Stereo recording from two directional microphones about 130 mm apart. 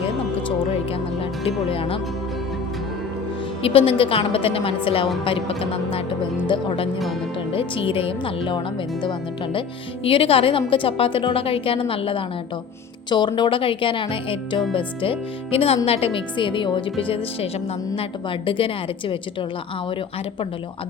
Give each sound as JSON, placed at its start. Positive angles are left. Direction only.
{"t": 1.2, "sound": "speech", "side_deg": 45}
{"t": 3.6, "sound": "a woman's voice", "side_deg": 45}